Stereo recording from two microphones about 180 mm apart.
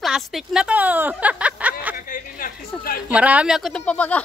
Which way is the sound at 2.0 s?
50° left (ahead or behind).